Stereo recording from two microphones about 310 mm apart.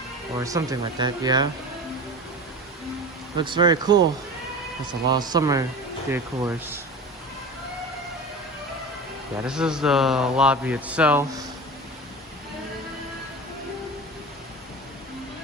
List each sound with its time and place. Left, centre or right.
0.3 s speech: centre
3.3 s speech: centre
5.0 s speech: centre
9.5 s speech: centre